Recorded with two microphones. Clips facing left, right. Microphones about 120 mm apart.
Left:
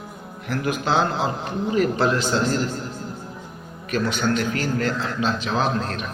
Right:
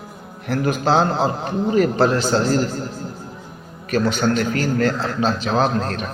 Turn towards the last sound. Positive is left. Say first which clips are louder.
# right 4 dB
turn(degrees=-40)  # may be behind; listen again after turning